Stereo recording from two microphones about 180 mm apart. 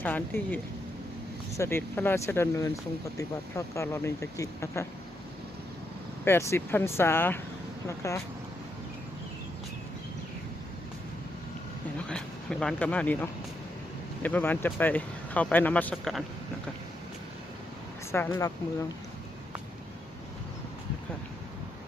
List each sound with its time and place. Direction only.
0.0 s speech: 10° left (ahead or behind)
6.2 s speech: 15° left (ahead or behind)
12.0 s speech: 5° left (ahead or behind)
18.1 s speech: 15° left (ahead or behind)